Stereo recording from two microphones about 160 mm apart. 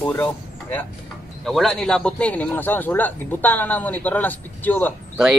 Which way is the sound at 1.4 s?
Centre (ahead or behind).